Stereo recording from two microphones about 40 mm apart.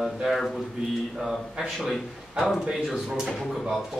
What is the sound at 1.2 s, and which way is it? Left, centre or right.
Speech, centre.